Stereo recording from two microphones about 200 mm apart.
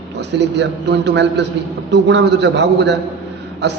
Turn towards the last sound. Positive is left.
turn(degrees=-60)  # may be behind; listen again after turning